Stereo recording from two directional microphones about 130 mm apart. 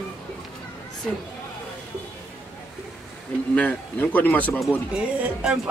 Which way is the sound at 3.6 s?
15° left (ahead or behind).